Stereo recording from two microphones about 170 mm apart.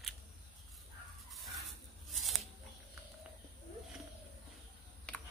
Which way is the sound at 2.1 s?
Centre (ahead or behind).